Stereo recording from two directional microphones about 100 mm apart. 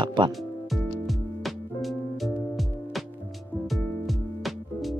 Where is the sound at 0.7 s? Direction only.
Centre (ahead or behind).